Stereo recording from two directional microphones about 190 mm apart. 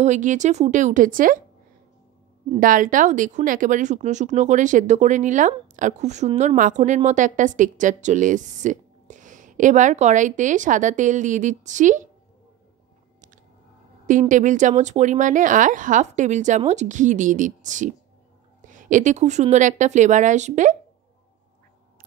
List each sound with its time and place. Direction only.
0.0 s speech: 40° right (ahead or behind)
2.5 s speech: 45° right (ahead or behind)
14.0 s speech: 40° right (ahead or behind)